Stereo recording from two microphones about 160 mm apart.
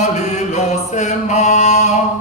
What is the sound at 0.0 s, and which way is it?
Chant, 45° left (ahead or behind).